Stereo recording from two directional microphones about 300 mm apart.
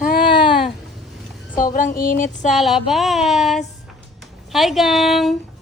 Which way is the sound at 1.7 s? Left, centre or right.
Left.